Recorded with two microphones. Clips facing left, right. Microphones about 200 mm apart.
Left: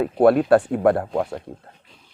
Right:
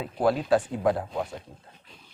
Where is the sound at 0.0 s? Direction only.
60° left (ahead or behind).